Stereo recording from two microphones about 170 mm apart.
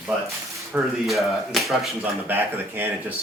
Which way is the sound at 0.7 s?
15° right (ahead or behind).